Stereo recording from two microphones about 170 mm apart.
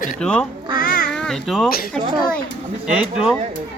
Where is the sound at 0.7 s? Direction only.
55° left (ahead or behind).